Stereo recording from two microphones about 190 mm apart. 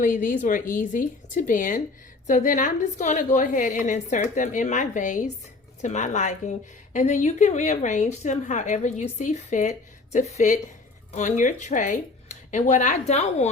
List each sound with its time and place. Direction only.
0.0 s a woman's voice: 45° left (ahead or behind)